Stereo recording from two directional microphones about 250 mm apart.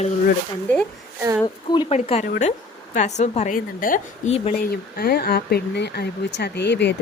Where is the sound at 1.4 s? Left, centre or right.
Centre.